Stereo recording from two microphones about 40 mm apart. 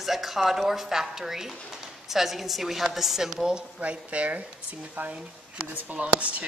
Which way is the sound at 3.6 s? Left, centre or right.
Right.